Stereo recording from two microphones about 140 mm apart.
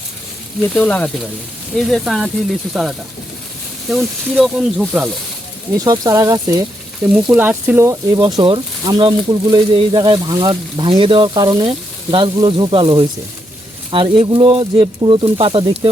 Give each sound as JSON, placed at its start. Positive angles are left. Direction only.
{"t": 0.7, "sound": "speech", "side_deg": 10}
{"t": 5.8, "sound": "speech", "side_deg": -25}
{"t": 7.3, "sound": "speech", "side_deg": -10}